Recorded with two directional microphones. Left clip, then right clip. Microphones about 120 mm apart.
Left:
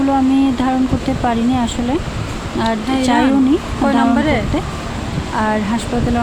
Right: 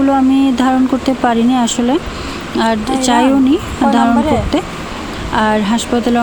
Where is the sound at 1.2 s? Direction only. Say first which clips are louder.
Right 4 dB; 25° right (ahead or behind).